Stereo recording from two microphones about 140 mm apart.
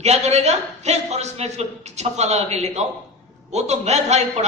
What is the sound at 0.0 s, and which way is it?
A man's voice, 50° right (ahead or behind).